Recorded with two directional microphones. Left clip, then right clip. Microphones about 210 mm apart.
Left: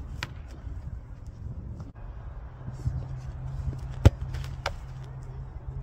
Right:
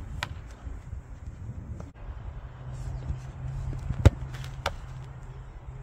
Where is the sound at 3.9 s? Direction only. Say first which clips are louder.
Right 4 dB; 45° left (ahead or behind).